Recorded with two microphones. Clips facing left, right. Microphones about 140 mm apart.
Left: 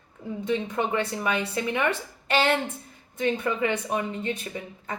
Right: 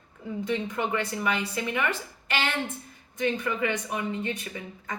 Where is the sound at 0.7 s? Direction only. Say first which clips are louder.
Left 2 dB; 25° left (ahead or behind).